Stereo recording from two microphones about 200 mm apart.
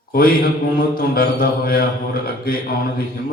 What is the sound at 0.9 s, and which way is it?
Speech, 50° left (ahead or behind).